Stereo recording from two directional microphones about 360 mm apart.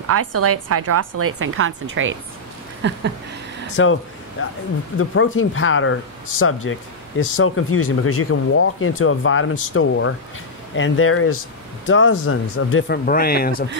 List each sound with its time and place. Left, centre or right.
0.0 s a woman's voice: right
2.8 s a sound: right
3.7 s speech: left